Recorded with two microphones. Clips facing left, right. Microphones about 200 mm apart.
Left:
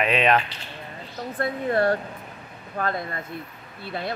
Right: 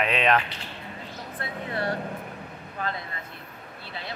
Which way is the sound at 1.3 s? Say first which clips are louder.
Left 9 dB; 45° left (ahead or behind).